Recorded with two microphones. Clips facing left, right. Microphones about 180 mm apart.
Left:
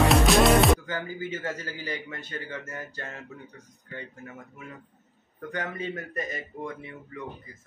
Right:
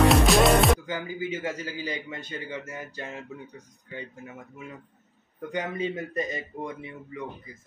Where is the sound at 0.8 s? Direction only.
15° right (ahead or behind).